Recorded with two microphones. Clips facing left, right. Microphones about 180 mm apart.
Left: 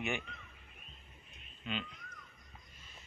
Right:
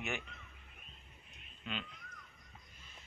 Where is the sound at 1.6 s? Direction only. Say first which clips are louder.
Left 3 dB; 5° left (ahead or behind).